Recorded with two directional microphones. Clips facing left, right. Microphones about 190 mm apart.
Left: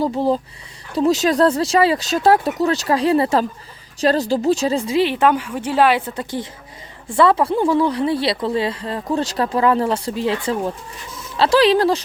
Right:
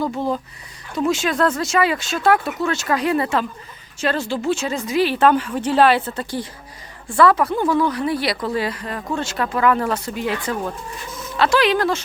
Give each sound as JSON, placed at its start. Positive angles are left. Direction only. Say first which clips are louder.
{"t": 0.0, "sound": "a woman's voice", "louder": "left 4 dB", "side_deg": 30}